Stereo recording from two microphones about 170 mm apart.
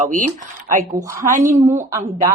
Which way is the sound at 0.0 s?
50° right (ahead or behind).